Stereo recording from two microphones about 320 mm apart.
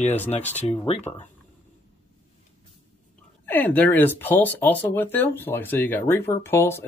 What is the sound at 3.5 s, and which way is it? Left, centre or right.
Speech, centre.